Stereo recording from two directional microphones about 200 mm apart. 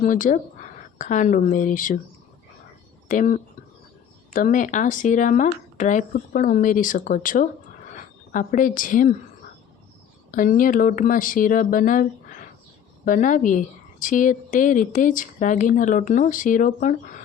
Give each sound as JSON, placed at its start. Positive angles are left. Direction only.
{"t": 0.0, "sound": "speech", "side_deg": 40}
{"t": 3.1, "sound": "a woman's voice", "side_deg": 40}
{"t": 10.3, "sound": "speech", "side_deg": 40}